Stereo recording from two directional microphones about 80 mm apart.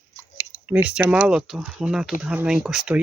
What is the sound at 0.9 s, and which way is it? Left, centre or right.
Speech, centre.